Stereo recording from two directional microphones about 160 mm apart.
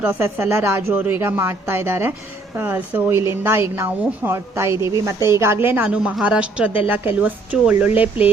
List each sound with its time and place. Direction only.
0.0 s speech: 10° right (ahead or behind)